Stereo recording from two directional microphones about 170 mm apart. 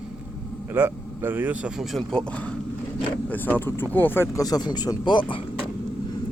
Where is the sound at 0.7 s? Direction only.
15° right (ahead or behind); by 5.2 s 25° left (ahead or behind).